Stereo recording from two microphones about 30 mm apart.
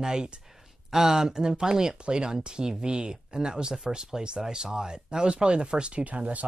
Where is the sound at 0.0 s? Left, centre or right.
Right.